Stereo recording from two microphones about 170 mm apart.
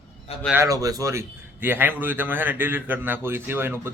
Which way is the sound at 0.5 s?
20° right (ahead or behind).